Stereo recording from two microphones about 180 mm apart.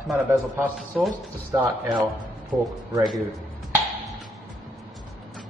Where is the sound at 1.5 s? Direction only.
20° right (ahead or behind).